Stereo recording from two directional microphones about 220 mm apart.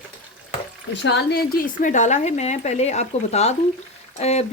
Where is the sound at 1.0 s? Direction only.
50° left (ahead or behind).